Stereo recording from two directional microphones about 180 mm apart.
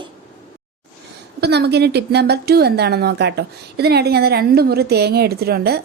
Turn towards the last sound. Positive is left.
turn(degrees=-60)  # may be behind; listen again after turning